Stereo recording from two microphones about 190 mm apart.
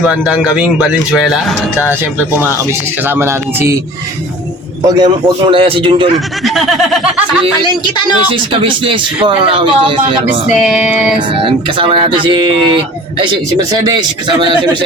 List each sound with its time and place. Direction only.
0.0 s speech: 5° right (ahead or behind)
3.2 s speech: 15° right (ahead or behind)
4.9 s speech: 25° right (ahead or behind)
6.9 s speech: 5° right (ahead or behind)
8.3 s speech: 25° right (ahead or behind)
10.5 s speech: 5° right (ahead or behind)
11.3 s speech: 30° right (ahead or behind)